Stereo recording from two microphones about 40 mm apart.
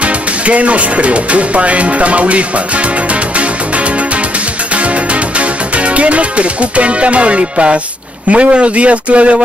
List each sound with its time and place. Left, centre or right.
0.0 s speech: right
5.4 s music: right
8.3 s speech: right